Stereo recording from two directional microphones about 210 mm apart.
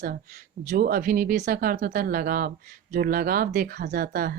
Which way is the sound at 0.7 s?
45° right (ahead or behind).